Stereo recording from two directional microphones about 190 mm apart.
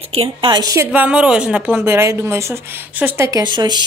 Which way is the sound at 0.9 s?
5° right (ahead or behind).